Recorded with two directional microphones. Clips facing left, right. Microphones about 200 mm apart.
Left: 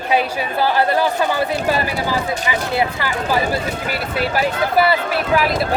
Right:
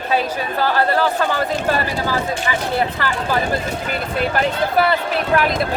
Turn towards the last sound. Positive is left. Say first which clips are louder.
# even
turn(degrees=5)  # may be behind; listen again after turning